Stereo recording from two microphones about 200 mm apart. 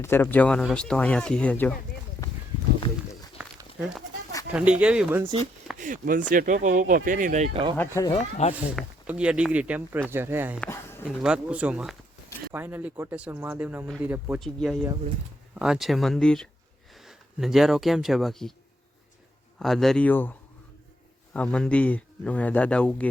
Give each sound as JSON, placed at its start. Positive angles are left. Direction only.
{"t": 0.0, "sound": "speech", "side_deg": 10}
{"t": 3.8, "sound": "speech", "side_deg": 0}
{"t": 5.8, "sound": "speech", "side_deg": -40}
{"t": 8.1, "sound": "speech", "side_deg": 30}
{"t": 8.7, "sound": "speech", "side_deg": -5}
{"t": 10.6, "sound": "a sound", "side_deg": 10}
{"t": 11.2, "sound": "speech", "side_deg": -5}
{"t": 19.5, "sound": "speech", "side_deg": 0}
{"t": 21.3, "sound": "a man's voice", "side_deg": 5}